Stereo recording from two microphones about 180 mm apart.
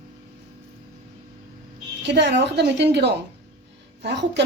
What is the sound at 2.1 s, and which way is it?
A woman's voice, 70° right (ahead or behind).